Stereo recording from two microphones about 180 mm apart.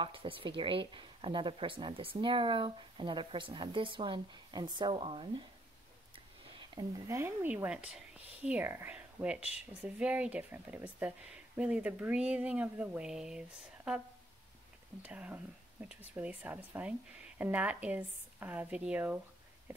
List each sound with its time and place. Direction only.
0.0 s a woman's voice: 30° right (ahead or behind)
6.7 s speech: 20° right (ahead or behind)